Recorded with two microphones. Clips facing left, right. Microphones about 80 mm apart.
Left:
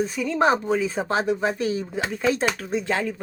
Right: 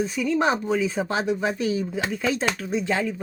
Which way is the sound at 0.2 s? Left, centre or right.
Left.